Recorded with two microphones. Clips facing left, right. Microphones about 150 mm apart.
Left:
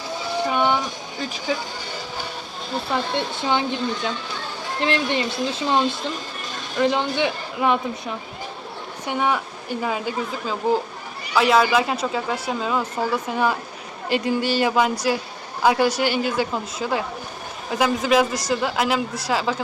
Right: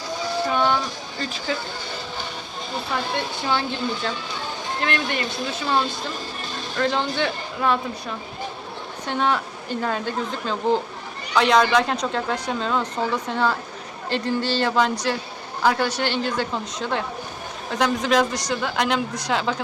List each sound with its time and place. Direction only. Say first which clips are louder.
0.5 s speech: left 1 dB; 15° left (ahead or behind)
3.2 s speech: left 1 dB; 20° left (ahead or behind); by 19.6 s 5° left (ahead or behind)